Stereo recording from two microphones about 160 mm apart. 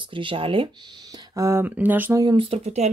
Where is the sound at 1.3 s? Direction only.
15° right (ahead or behind).